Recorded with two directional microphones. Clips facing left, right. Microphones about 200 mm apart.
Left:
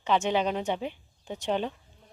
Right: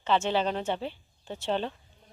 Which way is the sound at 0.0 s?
10° left (ahead or behind).